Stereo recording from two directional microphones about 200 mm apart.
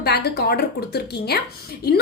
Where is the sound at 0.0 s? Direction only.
55° left (ahead or behind).